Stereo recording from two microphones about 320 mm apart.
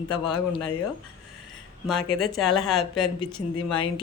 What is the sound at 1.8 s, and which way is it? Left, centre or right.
Speech, centre.